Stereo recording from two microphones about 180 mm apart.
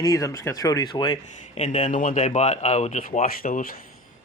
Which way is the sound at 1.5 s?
40° left (ahead or behind).